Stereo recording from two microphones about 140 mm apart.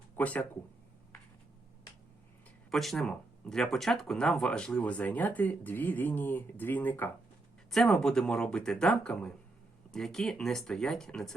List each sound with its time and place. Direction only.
0.2 s speech: 10° left (ahead or behind)
2.6 s speech: centre (ahead or behind)
7.7 s speech: 5° left (ahead or behind)